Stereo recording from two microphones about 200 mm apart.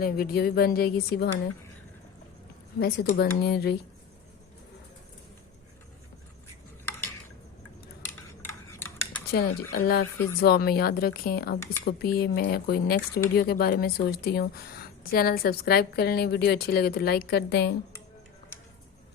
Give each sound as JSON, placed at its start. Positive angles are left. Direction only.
{"t": 0.0, "sound": "speech", "side_deg": 50}
{"t": 2.7, "sound": "speech", "side_deg": 55}
{"t": 8.0, "sound": "a sound", "side_deg": 10}
{"t": 9.3, "sound": "speech", "side_deg": 50}